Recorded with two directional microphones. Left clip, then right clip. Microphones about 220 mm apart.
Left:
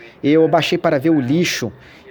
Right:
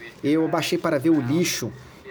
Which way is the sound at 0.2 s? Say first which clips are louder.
Left 9 dB; 20° left (ahead or behind).